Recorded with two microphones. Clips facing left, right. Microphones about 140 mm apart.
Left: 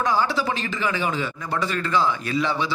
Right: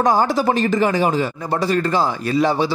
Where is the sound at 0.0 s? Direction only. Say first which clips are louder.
Right 6 dB; 45° right (ahead or behind).